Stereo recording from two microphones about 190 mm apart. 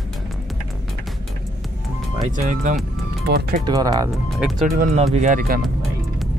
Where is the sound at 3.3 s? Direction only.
55° right (ahead or behind).